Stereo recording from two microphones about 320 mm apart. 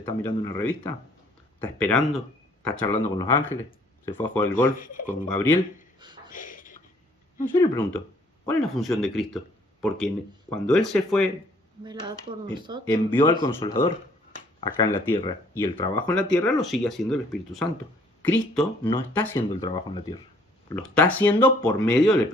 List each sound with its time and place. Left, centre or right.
0.0 s speech: centre
4.5 s speech: left
5.3 s speech: centre
6.0 s a sound: centre
6.3 s a sound: left
7.4 s speech: centre
10.5 s speech: centre
11.8 s speech: centre
12.8 s speech: centre
16.4 s speech: centre
20.7 s speech: centre